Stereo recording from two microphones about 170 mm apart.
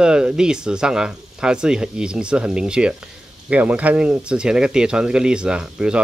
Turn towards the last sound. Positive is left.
turn(degrees=-5)  # may be behind; listen again after turning